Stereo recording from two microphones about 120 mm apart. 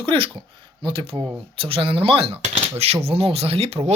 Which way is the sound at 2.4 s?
65° right (ahead or behind).